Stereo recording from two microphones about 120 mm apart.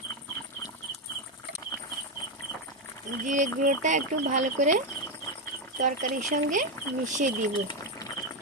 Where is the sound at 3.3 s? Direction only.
90° right.